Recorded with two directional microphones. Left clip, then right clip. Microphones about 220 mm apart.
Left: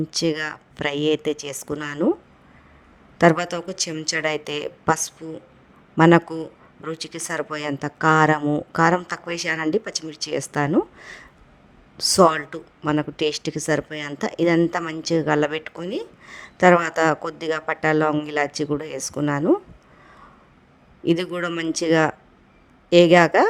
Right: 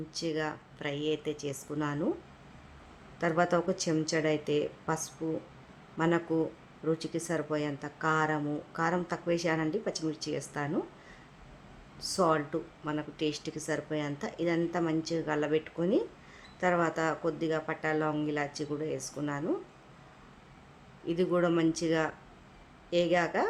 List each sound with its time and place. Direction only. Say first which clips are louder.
0.1 s speech: left 6 dB; 45° left (ahead or behind)
3.2 s speech: left 10 dB; 50° left (ahead or behind)
21.3 s speech: left 3 dB; 45° left (ahead or behind)